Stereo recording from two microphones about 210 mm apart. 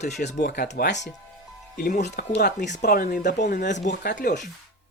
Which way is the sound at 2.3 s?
50° left (ahead or behind).